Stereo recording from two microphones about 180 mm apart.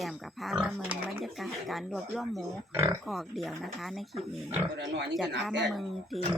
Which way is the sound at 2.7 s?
15° right (ahead or behind).